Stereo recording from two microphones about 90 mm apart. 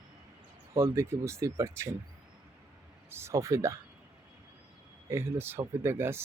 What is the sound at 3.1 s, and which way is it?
Speech, 30° right (ahead or behind).